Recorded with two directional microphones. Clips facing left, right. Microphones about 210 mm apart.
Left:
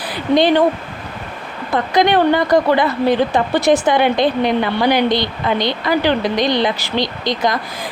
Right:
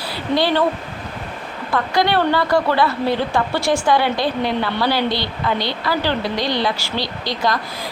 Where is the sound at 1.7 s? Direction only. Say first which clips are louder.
Left 4 dB; 20° left (ahead or behind).